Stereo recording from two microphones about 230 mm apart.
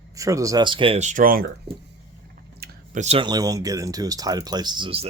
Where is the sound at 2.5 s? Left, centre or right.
Right.